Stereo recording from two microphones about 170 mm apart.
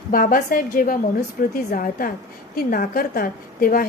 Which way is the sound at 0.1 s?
55° left (ahead or behind).